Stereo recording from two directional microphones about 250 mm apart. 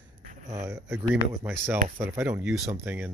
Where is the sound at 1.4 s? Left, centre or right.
Centre.